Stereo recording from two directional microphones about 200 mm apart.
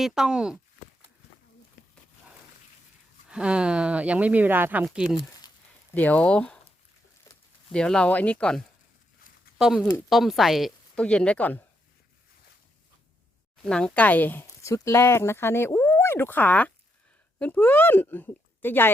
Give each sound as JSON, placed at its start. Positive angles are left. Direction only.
{"t": 0.0, "sound": "speech", "side_deg": -5}
{"t": 3.2, "sound": "speech", "side_deg": -5}
{"t": 5.4, "sound": "a sound", "side_deg": 20}
{"t": 5.9, "sound": "speech", "side_deg": 10}
{"t": 7.3, "sound": "a sound", "side_deg": 15}
{"t": 7.7, "sound": "speech", "side_deg": 5}
{"t": 13.7, "sound": "speech", "side_deg": 5}